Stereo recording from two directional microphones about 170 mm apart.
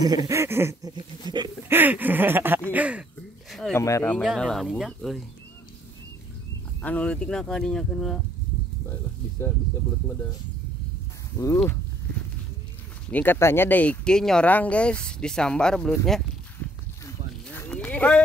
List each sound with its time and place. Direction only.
0.0 s a sound: 20° right (ahead or behind)
1.3 s speech: 25° right (ahead or behind)
1.7 s a sound: 10° right (ahead or behind)
3.7 s speech: 15° left (ahead or behind)
4.2 s speech: centre (ahead or behind)
6.8 s speech: 10° left (ahead or behind)
9.4 s speech: 15° left (ahead or behind)
11.3 s speech: 15° left (ahead or behind)
13.1 s speech: 10° left (ahead or behind)
17.6 s livestock: 10° left (ahead or behind)